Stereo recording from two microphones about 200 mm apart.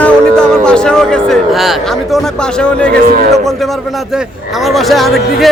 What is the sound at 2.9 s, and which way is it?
Speech, 50° right (ahead or behind).